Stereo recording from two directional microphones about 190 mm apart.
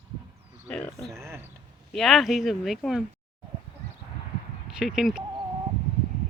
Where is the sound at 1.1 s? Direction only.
15° right (ahead or behind).